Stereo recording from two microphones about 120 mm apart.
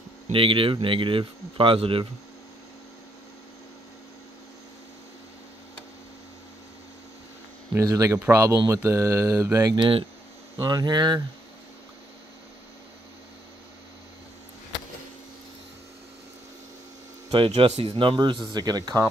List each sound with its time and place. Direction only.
0.3 s speech: 45° right (ahead or behind)
7.8 s speech: 30° right (ahead or behind)
17.6 s speech: 55° right (ahead or behind); by 19.0 s 35° right (ahead or behind)